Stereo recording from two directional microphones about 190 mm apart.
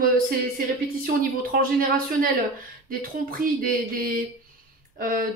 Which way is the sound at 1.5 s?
50° right (ahead or behind).